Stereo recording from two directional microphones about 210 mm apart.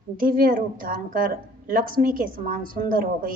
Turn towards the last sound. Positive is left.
turn(degrees=-40)  # may be behind; listen again after turning